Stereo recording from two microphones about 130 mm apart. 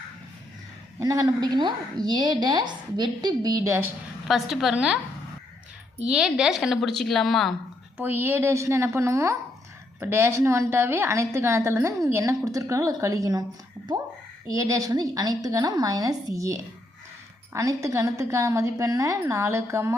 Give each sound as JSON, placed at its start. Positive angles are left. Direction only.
{"t": 0.9, "sound": "a woman's voice", "side_deg": -25}
{"t": 4.3, "sound": "a woman's voice", "side_deg": 0}
{"t": 6.1, "sound": "a woman's voice", "side_deg": -5}
{"t": 7.9, "sound": "a woman's voice", "side_deg": -15}
{"t": 14.5, "sound": "a woman's voice", "side_deg": -25}